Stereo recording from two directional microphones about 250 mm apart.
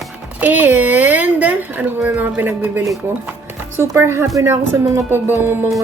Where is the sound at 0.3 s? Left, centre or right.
Centre.